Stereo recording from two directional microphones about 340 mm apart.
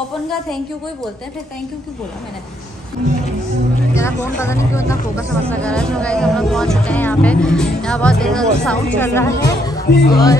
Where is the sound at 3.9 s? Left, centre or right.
Centre.